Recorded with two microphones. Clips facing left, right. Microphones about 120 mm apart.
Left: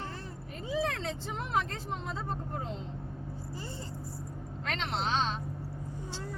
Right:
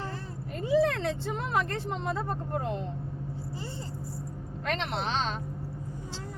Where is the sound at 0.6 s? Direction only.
70° right (ahead or behind).